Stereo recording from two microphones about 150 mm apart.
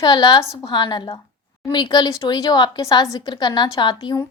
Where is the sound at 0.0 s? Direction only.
30° left (ahead or behind).